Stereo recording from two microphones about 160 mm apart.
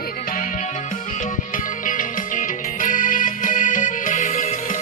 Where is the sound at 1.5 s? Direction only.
55° left (ahead or behind).